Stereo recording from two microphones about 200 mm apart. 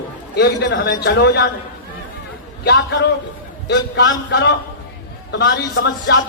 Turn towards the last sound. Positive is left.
turn(degrees=55)  # may be behind; listen again after turning